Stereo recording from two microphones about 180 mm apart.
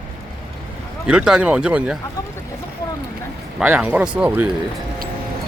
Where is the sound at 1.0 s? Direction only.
5° right (ahead or behind).